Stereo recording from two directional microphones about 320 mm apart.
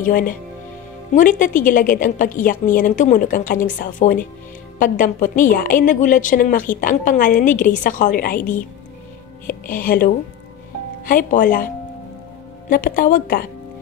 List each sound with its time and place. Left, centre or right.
0.0 s a woman's voice: left